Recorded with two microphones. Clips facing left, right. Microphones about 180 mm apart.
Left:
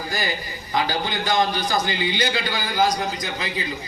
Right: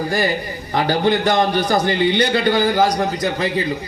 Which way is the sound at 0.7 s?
60° right (ahead or behind).